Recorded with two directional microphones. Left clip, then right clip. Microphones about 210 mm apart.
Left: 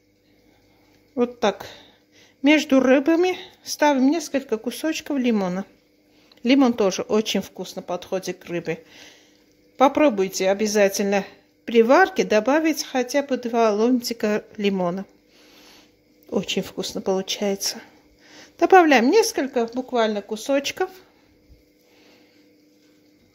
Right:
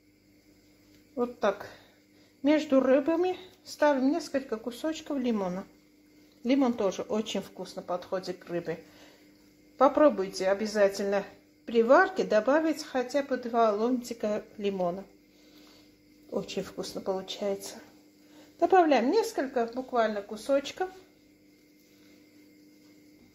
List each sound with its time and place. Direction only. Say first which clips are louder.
1.1 s speech: left 7 dB; 50° left (ahead or behind)
9.8 s speech: left 5 dB; 35° left (ahead or behind)
12.0 s speech: left 7 dB; 90° left
12.9 s speech: left 7 dB; 50° left (ahead or behind)
16.3 s speech: left 9 dB; 50° left (ahead or behind)